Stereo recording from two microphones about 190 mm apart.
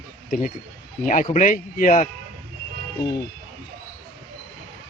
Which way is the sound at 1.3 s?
40° left (ahead or behind).